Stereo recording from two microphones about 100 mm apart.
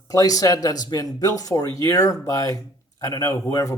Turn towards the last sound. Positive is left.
turn(degrees=35)  # may be behind; listen again after turning